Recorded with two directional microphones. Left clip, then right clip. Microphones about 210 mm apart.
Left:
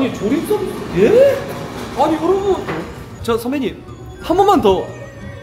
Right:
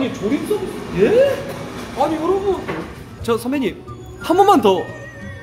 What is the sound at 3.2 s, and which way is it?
Speech, 10° right (ahead or behind).